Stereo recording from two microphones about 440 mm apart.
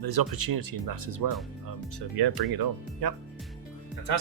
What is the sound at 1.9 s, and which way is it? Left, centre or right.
Speech, right.